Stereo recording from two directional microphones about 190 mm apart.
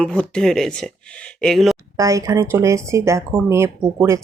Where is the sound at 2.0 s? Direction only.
15° right (ahead or behind).